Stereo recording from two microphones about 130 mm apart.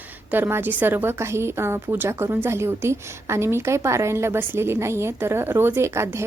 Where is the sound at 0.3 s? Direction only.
15° right (ahead or behind).